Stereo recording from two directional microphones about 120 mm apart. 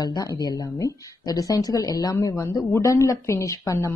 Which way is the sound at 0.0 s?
35° left (ahead or behind).